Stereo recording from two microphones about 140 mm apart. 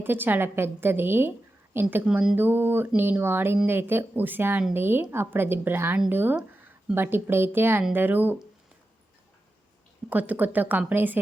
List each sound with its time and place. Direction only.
0.0 s speech: 15° right (ahead or behind)
10.1 s speech: 10° right (ahead or behind)